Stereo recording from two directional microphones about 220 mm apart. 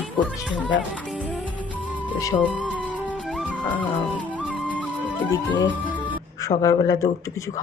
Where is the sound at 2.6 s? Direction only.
5° right (ahead or behind).